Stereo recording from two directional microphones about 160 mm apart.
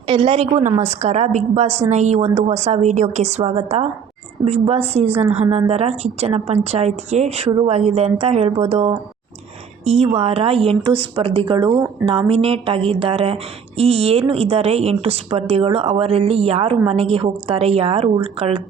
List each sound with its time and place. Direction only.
0.1 s a woman's voice: 35° right (ahead or behind)